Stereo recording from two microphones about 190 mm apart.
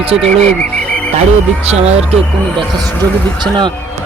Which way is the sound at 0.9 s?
5° left (ahead or behind).